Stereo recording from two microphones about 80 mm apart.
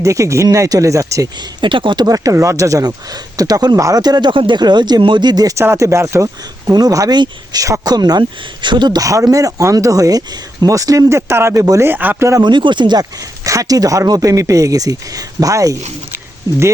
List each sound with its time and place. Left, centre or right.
0.0 s speech: right
1.4 s speech: right
2.0 s speech: right
3.8 s speech: right
4.0 s speech: right
5.5 s speech: right
7.1 s speech: right
7.6 s speech: right
8.2 s speech: right
9.0 s speech: right
11.9 s a man's voice: right
12.4 s speech: right
16.1 s a sound: right